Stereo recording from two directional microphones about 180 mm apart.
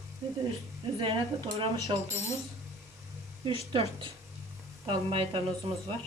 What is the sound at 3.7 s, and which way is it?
Speech, 30° right (ahead or behind).